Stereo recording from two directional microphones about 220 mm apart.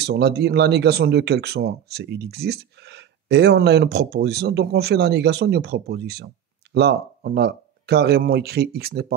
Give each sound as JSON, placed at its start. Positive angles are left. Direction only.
{"t": 0.0, "sound": "speech", "side_deg": -50}